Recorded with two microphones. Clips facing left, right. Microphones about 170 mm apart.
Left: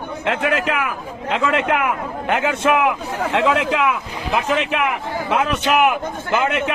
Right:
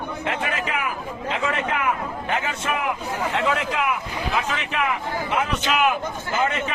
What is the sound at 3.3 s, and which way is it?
Speech, 90° left.